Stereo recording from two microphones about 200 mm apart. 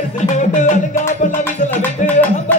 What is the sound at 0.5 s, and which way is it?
Music, 40° left (ahead or behind).